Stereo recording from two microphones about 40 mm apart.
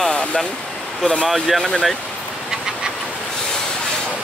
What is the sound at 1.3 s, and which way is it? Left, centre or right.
Speech, centre.